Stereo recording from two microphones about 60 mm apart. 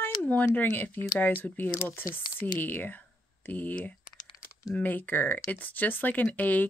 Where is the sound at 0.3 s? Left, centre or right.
Left.